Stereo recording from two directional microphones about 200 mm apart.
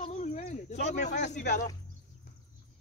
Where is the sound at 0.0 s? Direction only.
35° left (ahead or behind).